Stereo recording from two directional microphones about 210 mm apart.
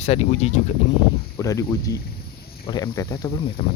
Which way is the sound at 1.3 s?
15° left (ahead or behind).